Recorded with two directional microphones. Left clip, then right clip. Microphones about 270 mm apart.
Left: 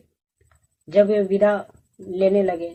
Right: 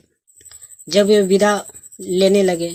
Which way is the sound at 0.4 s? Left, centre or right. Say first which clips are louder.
Right 14 dB; right.